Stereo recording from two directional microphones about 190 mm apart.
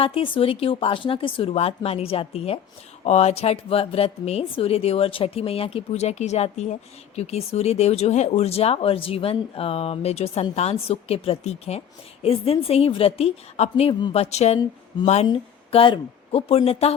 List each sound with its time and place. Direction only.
0.0 s speech: 30° left (ahead or behind)